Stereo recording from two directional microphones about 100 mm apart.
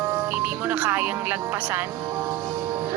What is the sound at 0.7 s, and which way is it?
Speech, 20° right (ahead or behind).